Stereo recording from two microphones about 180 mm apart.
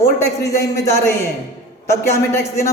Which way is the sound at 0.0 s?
15° left (ahead or behind).